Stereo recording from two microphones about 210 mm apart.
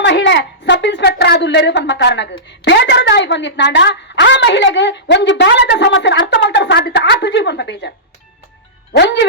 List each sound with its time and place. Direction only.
0.0 s a woman's voice: 55° left (ahead or behind)
9.0 s a woman's voice: 55° left (ahead or behind)